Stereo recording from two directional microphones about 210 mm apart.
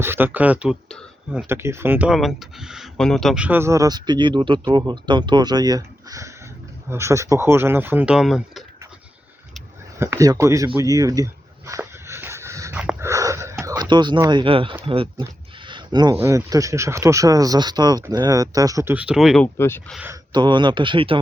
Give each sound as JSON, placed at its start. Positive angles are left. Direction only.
{"t": 0.0, "sound": "speech", "side_deg": -10}
{"t": 1.5, "sound": "speech", "side_deg": -10}
{"t": 10.0, "sound": "a sound", "side_deg": -15}
{"t": 14.8, "sound": "speech", "side_deg": -25}
{"t": 19.5, "sound": "speech", "side_deg": 10}
{"t": 20.3, "sound": "speech", "side_deg": -20}